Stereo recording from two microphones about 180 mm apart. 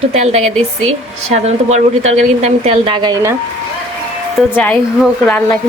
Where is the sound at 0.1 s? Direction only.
35° right (ahead or behind).